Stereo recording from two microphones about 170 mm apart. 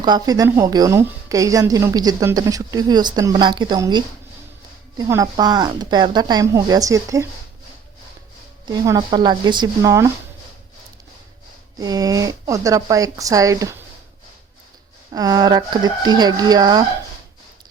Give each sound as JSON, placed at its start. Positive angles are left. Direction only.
{"t": 0.0, "sound": "a woman's voice", "side_deg": -25}
{"t": 8.6, "sound": "a woman's voice", "side_deg": -25}
{"t": 11.8, "sound": "a woman's voice", "side_deg": -20}
{"t": 15.1, "sound": "a woman's voice", "side_deg": -20}